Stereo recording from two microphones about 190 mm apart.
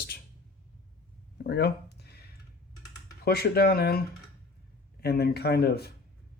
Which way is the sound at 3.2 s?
55° left (ahead or behind).